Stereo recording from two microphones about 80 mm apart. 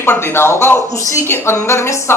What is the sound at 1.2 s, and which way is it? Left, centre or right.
Speech, left.